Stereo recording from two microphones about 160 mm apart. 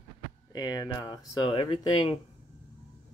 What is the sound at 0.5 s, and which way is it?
Speech, 25° left (ahead or behind).